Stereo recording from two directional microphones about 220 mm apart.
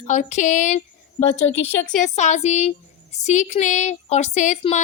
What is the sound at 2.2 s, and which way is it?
A woman's voice, 30° left (ahead or behind).